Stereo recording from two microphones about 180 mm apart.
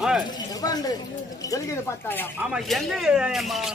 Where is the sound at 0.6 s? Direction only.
20° left (ahead or behind).